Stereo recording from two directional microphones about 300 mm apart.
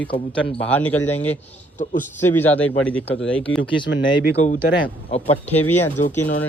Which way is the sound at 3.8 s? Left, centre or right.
Left.